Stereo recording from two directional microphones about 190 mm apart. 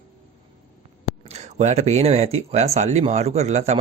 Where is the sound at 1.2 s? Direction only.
35° right (ahead or behind).